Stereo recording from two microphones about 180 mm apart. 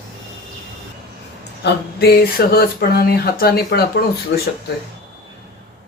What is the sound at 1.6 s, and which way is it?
Speech, 65° left (ahead or behind).